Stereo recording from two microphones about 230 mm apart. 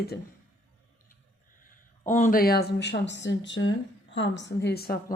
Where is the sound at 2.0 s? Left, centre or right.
Left.